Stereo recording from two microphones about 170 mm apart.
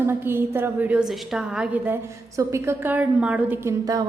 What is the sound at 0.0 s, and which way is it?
A woman's voice, 15° right (ahead or behind).